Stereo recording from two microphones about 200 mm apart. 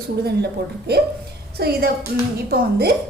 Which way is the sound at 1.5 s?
50° right (ahead or behind).